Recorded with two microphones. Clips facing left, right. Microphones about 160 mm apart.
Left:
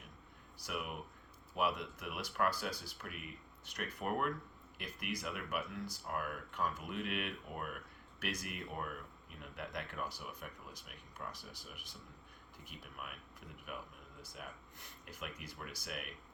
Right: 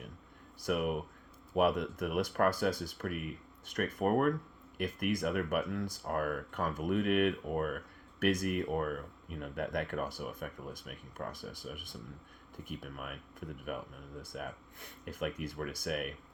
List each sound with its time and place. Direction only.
0.6 s speech: 55° right (ahead or behind)